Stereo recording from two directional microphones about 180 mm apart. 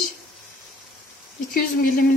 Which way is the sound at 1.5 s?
50° left (ahead or behind).